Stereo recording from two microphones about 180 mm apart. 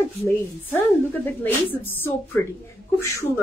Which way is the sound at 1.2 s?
10° left (ahead or behind).